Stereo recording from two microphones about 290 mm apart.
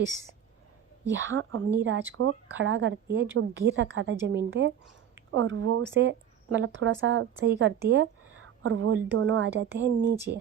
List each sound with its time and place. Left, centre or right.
1.0 s speech: right